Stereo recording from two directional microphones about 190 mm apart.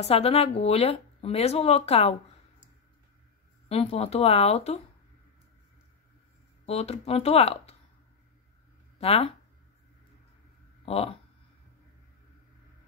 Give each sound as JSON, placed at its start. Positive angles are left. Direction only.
{"t": 0.1, "sound": "speech", "side_deg": 30}
{"t": 3.6, "sound": "speech", "side_deg": 30}
{"t": 6.6, "sound": "speech", "side_deg": 35}
{"t": 8.9, "sound": "speech", "side_deg": 30}
{"t": 10.9, "sound": "speech", "side_deg": 30}